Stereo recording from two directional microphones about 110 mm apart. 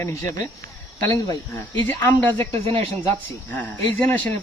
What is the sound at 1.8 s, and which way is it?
Speech, 15° left (ahead or behind).